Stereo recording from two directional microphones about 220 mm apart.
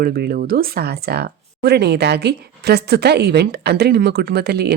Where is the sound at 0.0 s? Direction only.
45° right (ahead or behind).